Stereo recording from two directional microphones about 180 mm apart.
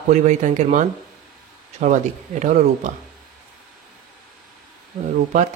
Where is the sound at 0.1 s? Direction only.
40° right (ahead or behind).